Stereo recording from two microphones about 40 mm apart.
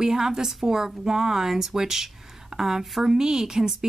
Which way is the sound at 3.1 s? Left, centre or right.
Centre.